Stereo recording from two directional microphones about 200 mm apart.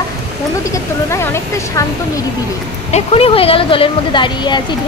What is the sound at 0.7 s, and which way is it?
Speech, 15° left (ahead or behind).